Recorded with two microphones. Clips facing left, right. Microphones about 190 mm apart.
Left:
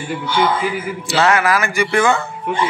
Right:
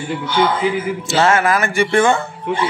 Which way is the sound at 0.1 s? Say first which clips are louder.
Even; 25° right (ahead or behind).